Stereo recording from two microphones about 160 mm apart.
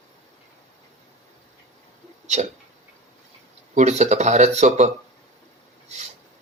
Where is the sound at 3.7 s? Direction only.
45° right (ahead or behind).